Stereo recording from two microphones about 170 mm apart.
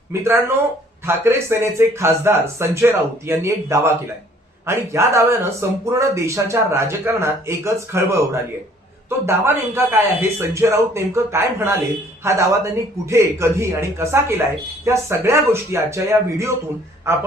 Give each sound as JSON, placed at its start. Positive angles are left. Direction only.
{"t": 0.1, "sound": "a man's voice", "side_deg": -15}
{"t": 9.7, "sound": "a man's voice", "side_deg": -15}